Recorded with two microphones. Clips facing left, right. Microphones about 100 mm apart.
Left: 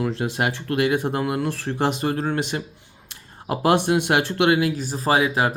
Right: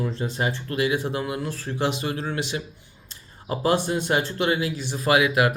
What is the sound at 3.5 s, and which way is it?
Speech, 60° left (ahead or behind).